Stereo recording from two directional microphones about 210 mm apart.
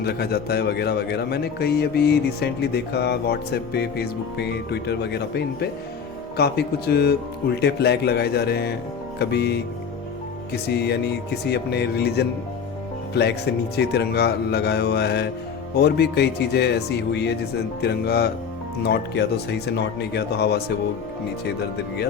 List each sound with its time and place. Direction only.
0.0 s a man's voice: 50° left (ahead or behind)